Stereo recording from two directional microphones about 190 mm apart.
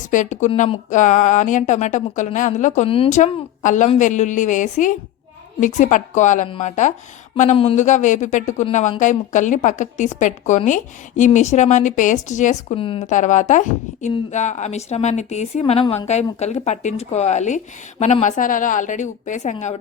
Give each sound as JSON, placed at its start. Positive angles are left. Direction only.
{"t": 0.1, "sound": "speech", "side_deg": 40}
{"t": 12.8, "sound": "speech", "side_deg": 30}
{"t": 13.1, "sound": "speech", "side_deg": 40}